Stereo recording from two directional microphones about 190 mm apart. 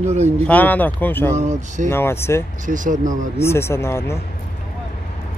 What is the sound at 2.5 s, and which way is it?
Speech, 40° right (ahead or behind).